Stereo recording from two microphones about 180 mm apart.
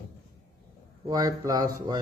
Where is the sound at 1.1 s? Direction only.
20° right (ahead or behind).